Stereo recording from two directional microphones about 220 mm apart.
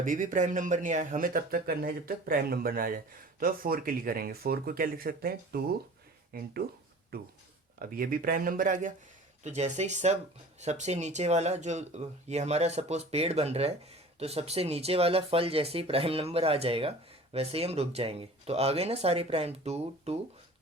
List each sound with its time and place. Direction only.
0.0 s speech: 35° right (ahead or behind)
7.8 s speech: 40° right (ahead or behind)